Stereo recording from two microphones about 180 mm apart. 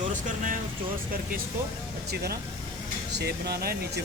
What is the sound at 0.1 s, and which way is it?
Vehicle, 45° right (ahead or behind).